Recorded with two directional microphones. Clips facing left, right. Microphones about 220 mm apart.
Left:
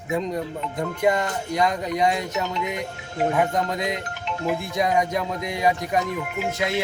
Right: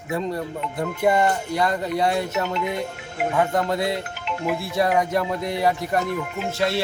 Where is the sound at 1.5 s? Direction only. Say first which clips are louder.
Even; 15° left (ahead or behind).